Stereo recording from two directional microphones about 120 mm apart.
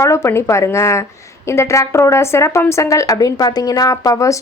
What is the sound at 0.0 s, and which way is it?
Speech, 25° left (ahead or behind).